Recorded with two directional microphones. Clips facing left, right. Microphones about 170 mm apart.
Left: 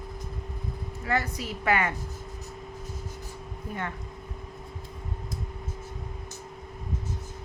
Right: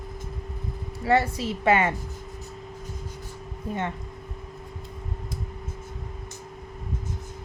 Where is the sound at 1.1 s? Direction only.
30° right (ahead or behind).